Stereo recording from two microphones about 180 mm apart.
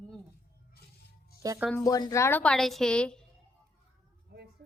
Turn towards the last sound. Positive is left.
turn(degrees=5)  # may be behind; listen again after turning